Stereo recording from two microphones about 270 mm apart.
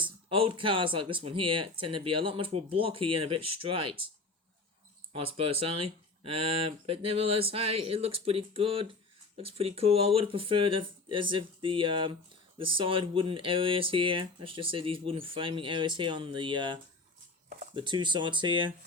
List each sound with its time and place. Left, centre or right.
0.0 s speech: centre
5.1 s speech: right